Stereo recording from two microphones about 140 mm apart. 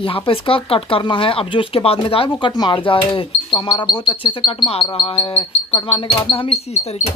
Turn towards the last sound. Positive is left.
turn(degrees=50)  # may be behind; listen again after turning